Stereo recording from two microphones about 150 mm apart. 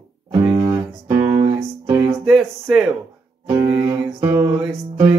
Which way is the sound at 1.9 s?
15° right (ahead or behind).